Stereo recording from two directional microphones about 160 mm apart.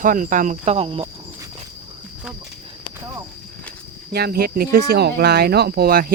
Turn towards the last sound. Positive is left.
turn(degrees=-70)  # may be behind; listen again after turning